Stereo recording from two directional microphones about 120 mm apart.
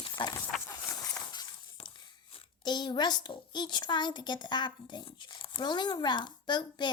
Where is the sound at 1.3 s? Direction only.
35° left (ahead or behind).